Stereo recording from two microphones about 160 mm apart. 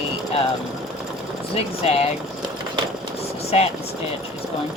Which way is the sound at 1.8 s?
40° left (ahead or behind).